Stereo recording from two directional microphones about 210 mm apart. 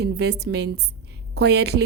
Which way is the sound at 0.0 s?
50° right (ahead or behind).